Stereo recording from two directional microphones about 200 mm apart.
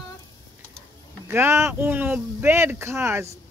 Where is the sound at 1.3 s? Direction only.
10° right (ahead or behind).